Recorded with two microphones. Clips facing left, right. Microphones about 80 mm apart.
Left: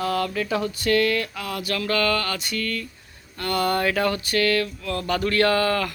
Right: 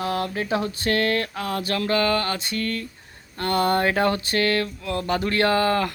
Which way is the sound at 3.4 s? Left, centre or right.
Right.